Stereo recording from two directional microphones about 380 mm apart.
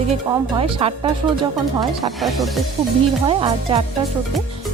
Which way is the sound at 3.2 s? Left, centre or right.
Centre.